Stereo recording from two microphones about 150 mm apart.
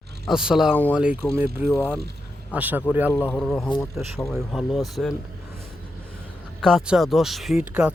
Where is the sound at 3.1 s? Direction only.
15° left (ahead or behind).